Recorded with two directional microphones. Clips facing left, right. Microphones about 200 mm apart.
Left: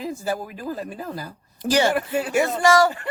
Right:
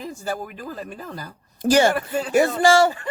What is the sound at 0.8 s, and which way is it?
Speech, 5° left (ahead or behind).